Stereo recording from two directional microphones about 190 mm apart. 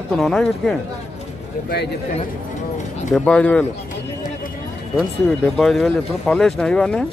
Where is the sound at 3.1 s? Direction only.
5° left (ahead or behind).